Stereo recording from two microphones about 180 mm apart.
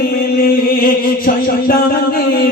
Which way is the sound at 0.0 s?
55° left (ahead or behind).